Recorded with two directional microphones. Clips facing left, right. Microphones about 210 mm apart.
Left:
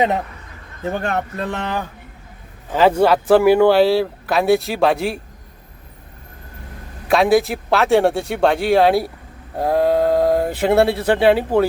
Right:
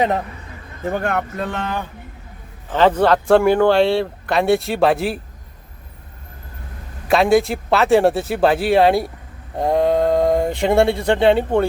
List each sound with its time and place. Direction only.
1.0 s speech: 20° left (ahead or behind)
2.7 s speech: 10° left (ahead or behind)
7.1 s speech: centre (ahead or behind)